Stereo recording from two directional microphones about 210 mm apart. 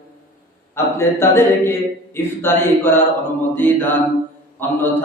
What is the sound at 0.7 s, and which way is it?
A man's voice, 10° left (ahead or behind).